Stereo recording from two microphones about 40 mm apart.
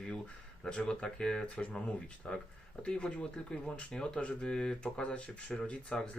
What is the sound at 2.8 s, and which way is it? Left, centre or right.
Speech, left.